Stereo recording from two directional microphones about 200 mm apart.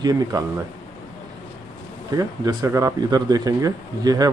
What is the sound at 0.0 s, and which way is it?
Speech, 20° right (ahead or behind).